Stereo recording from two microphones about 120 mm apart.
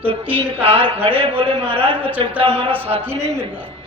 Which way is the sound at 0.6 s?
50° right (ahead or behind).